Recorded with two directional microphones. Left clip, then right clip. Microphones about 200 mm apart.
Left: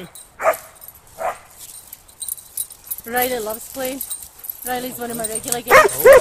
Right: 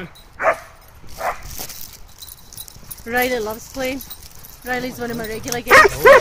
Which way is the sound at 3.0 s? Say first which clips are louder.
Right 2 dB; 5° right (ahead or behind).